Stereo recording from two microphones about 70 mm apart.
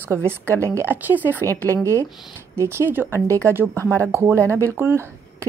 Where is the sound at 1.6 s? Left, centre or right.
Left.